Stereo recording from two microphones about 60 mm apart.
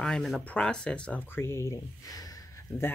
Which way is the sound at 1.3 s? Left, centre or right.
Left.